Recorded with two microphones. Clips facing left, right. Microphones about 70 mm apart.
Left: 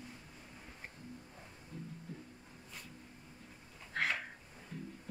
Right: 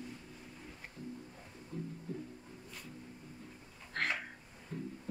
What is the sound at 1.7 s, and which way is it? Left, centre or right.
Music, right.